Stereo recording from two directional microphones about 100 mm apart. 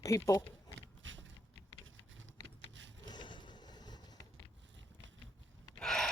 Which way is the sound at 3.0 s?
50° left (ahead or behind).